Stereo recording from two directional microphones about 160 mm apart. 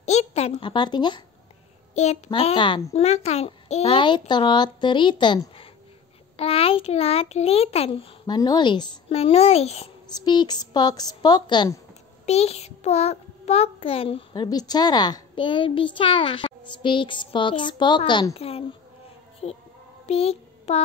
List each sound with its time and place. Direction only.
0.0 s a woman's voice: 45° left (ahead or behind); by 1.2 s 30° left (ahead or behind)
2.0 s a child's voice: 40° left (ahead or behind)
10.1 s a woman's voice: 25° left (ahead or behind)
12.3 s a child's voice: 40° left (ahead or behind)
20.1 s a sound: 40° left (ahead or behind)